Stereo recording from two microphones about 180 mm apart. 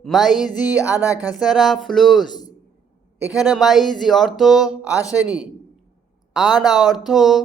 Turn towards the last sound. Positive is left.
turn(degrees=0)  # may be behind; listen again after turning